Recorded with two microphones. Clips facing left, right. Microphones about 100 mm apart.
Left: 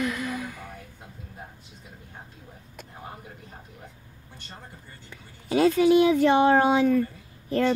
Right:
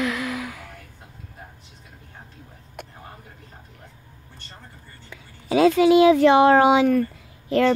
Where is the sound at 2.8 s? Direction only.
65° right (ahead or behind).